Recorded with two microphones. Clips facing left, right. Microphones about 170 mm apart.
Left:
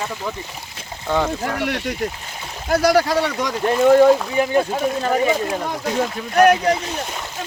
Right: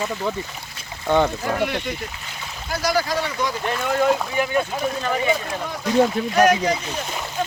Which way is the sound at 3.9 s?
35° left (ahead or behind).